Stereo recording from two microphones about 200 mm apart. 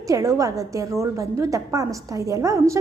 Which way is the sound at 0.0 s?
15° right (ahead or behind).